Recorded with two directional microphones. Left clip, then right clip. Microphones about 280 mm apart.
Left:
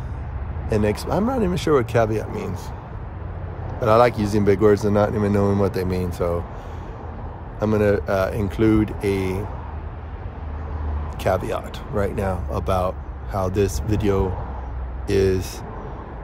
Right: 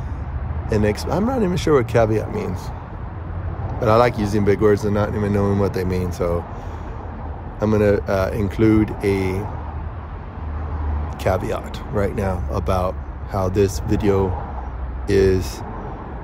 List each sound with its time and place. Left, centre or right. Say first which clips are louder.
0.7 s speech: right 1 dB; centre
3.8 s speech: even; centre
7.6 s speech: right 2 dB; centre
11.2 s speech: right 1 dB; centre